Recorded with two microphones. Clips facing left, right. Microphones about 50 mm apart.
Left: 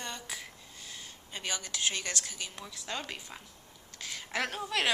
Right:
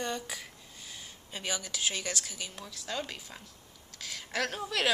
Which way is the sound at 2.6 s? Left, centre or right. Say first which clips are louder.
Right 2 dB; centre.